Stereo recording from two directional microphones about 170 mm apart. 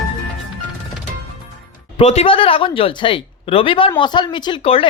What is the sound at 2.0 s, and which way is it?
Speech, 35° left (ahead or behind).